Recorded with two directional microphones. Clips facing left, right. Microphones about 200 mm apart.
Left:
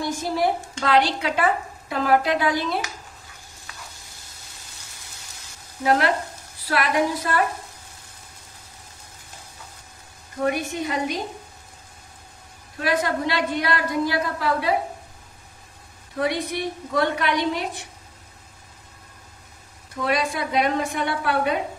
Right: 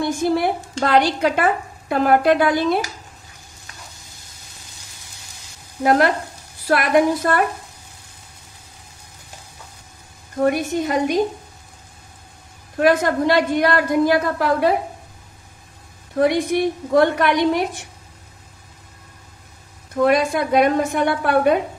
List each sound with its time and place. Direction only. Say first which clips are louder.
0.8 s a woman's voice: right 4 dB; 50° right (ahead or behind)
5.9 s a woman's voice: right 4 dB; 50° right (ahead or behind)
10.4 s a woman's voice: right 5 dB; 45° right (ahead or behind)
12.7 s a woman's voice: right 7 dB; 50° right (ahead or behind)
16.2 s a woman's voice: right 8 dB; 50° right (ahead or behind)
20.0 s a woman's voice: right 7 dB; 50° right (ahead or behind)